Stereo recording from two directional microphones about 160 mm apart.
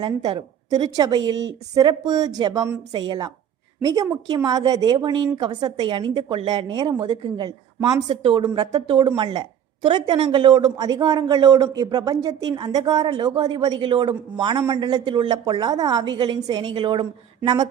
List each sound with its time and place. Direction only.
0.0 s speech: 30° right (ahead or behind)